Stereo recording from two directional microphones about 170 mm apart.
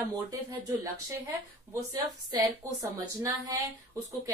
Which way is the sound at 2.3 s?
20° right (ahead or behind).